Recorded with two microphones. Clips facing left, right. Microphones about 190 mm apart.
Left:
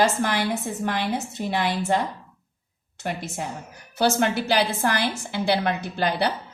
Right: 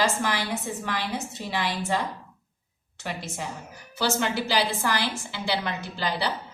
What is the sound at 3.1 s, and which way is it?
A woman's voice, 50° left (ahead or behind).